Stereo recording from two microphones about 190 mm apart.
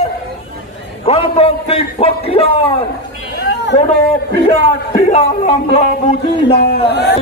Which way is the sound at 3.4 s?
65° left (ahead or behind).